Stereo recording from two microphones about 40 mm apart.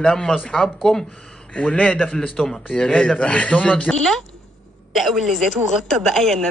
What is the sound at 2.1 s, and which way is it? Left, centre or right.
Speech, centre.